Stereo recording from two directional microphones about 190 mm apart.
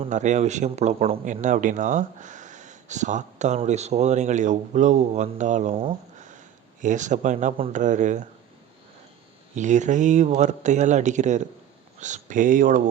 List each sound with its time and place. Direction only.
0.0 s speech: 40° right (ahead or behind)
6.1 s a sound: 40° right (ahead or behind)
6.8 s speech: 40° right (ahead or behind)
9.6 s speech: 40° right (ahead or behind)